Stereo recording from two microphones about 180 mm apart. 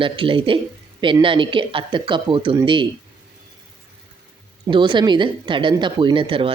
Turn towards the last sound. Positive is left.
turn(degrees=-30)  # may be behind; listen again after turning